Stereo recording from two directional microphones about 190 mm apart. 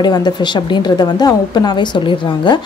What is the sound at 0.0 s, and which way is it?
Speech, 20° left (ahead or behind).